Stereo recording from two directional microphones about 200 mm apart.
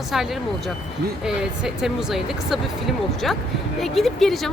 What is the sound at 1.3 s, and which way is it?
Speech, 5° right (ahead or behind).